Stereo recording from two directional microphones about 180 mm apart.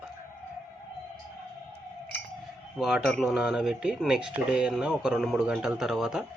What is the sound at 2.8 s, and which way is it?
Speech, centre (ahead or behind).